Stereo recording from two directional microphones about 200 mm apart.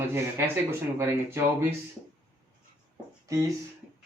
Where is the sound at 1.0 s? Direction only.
10° right (ahead or behind).